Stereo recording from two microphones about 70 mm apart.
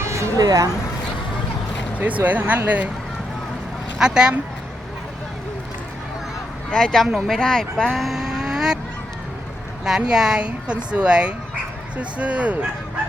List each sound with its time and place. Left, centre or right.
0.0 s a sound: right
0.4 s speech: right
2.0 s speech: right
3.9 s speech: centre
6.7 s speech: centre
9.8 s a woman's voice: centre